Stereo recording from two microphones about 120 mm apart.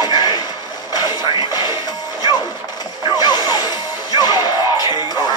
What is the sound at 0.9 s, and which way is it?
Television, 35° left (ahead or behind).